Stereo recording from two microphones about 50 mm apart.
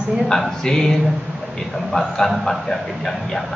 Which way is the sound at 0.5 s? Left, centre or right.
Centre.